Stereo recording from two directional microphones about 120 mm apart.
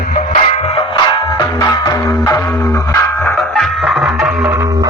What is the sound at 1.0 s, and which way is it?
Music, 35° left (ahead or behind).